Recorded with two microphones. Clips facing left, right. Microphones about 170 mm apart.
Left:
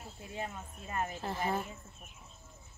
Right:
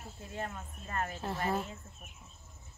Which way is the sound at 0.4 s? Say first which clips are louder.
Right 1 dB; 10° left (ahead or behind).